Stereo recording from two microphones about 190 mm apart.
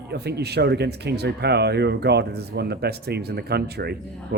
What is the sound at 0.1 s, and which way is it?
Speech, 60° right (ahead or behind).